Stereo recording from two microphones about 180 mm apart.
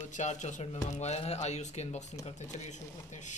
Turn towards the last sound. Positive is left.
turn(degrees=40)  # may be behind; listen again after turning